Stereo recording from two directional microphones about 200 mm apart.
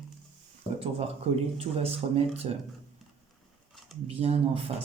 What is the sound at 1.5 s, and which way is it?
Speech, 30° right (ahead or behind).